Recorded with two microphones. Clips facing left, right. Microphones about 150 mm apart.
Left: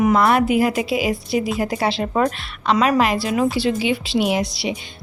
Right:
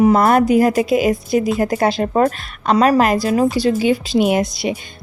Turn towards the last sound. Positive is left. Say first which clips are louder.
# right 4 dB
turn(degrees=-50)  # may be behind; listen again after turning